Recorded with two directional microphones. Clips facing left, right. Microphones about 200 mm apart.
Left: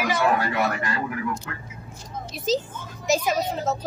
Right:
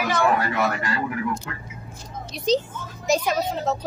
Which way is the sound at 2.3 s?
5° left (ahead or behind).